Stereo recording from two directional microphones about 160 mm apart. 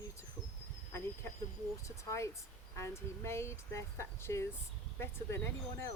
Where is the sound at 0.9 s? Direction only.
15° left (ahead or behind).